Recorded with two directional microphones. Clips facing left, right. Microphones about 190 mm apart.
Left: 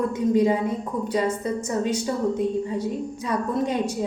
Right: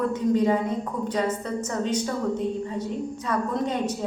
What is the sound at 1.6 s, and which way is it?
A woman's voice, 10° left (ahead or behind).